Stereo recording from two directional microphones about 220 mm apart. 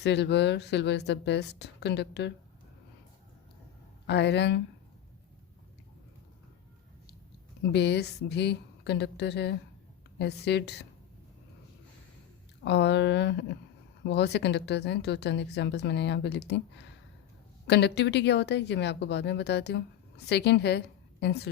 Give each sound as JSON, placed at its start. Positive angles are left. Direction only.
{"t": 0.0, "sound": "speech", "side_deg": 50}
{"t": 4.0, "sound": "speech", "side_deg": 50}
{"t": 7.7, "sound": "speech", "side_deg": 50}
{"t": 12.6, "sound": "speech", "side_deg": 50}
{"t": 17.7, "sound": "speech", "side_deg": 50}